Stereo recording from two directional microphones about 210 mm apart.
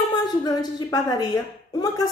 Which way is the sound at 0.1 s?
20° left (ahead or behind).